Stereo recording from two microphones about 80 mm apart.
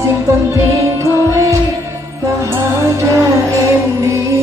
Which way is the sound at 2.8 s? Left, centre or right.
Right.